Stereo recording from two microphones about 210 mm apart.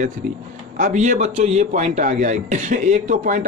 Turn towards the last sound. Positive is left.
turn(degrees=-35)  # may be behind; listen again after turning